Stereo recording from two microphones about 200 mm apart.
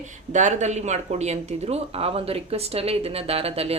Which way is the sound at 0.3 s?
35° right (ahead or behind).